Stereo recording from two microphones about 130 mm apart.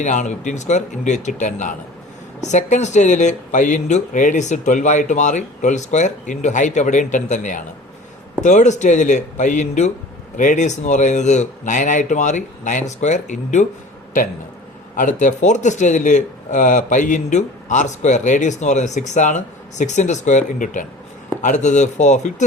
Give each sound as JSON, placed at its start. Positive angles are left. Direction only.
{"t": 0.0, "sound": "speech", "side_deg": 70}
{"t": 14.9, "sound": "speech", "side_deg": 75}
{"t": 21.4, "sound": "speech", "side_deg": 70}